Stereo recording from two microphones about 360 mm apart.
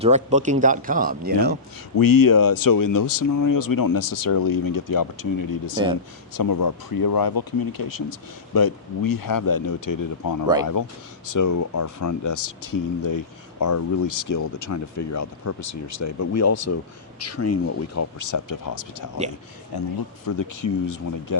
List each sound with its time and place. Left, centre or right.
0.0 s speech: centre
2.0 s speech: left
19.7 s speech: left